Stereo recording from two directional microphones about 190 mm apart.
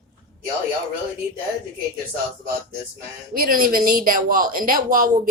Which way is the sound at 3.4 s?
50° right (ahead or behind).